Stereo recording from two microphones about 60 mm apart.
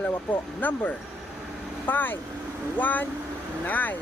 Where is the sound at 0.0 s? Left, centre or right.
Left.